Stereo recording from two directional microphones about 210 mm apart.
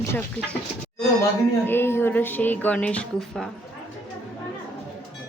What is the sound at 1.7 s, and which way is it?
A woman's voice, 10° left (ahead or behind).